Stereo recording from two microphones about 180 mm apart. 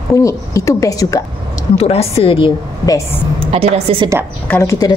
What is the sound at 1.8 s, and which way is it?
A woman's voice, 35° left (ahead or behind).